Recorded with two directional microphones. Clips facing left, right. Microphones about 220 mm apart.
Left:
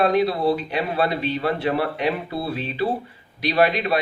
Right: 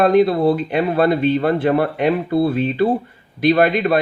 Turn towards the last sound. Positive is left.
turn(degrees=-50)  # may be behind; listen again after turning